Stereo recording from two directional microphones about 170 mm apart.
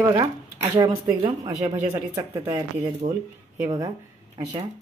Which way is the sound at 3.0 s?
35° right (ahead or behind).